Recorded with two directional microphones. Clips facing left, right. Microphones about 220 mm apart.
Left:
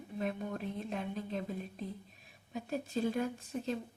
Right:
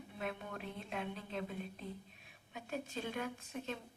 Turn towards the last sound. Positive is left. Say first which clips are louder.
# left 6 dB
turn(degrees=35)  # may be behind; listen again after turning